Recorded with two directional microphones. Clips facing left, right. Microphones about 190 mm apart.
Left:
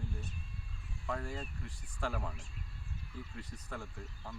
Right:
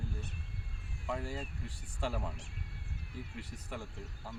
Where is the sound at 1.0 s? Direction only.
10° right (ahead or behind).